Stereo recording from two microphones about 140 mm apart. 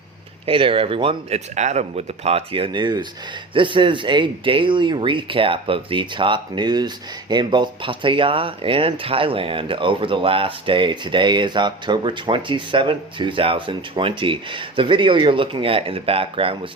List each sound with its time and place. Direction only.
0.4 s speech: 40° right (ahead or behind)
1.5 s speech: 55° right (ahead or behind)